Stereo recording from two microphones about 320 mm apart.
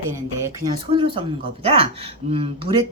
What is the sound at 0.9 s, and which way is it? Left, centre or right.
Speech, centre.